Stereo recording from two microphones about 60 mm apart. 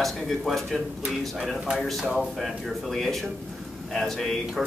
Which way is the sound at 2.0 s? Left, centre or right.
Centre.